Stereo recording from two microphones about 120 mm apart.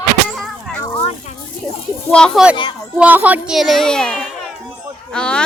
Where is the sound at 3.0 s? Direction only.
15° right (ahead or behind).